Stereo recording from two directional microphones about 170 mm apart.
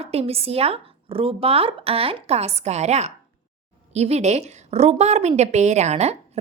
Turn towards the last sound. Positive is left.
turn(degrees=-40)  # may be behind; listen again after turning